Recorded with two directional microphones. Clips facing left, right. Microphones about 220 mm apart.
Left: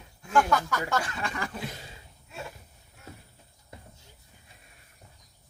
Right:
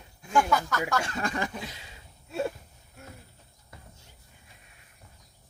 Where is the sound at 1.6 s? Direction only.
50° left (ahead or behind).